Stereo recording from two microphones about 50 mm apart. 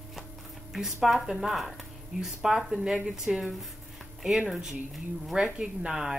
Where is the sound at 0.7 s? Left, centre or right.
Centre.